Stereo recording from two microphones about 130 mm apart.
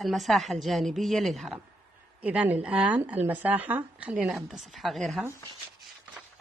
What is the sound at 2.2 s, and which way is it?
Speech, 10° right (ahead or behind).